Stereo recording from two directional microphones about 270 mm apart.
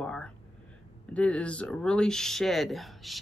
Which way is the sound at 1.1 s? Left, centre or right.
Centre.